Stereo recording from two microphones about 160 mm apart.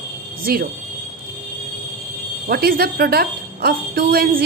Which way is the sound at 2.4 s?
70° right (ahead or behind).